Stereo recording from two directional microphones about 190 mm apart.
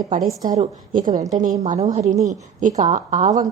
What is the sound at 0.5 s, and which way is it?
A woman's voice, 40° right (ahead or behind).